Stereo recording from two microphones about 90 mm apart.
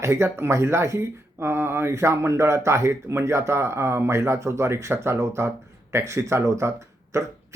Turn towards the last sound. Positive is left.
turn(degrees=-30)  # may be behind; listen again after turning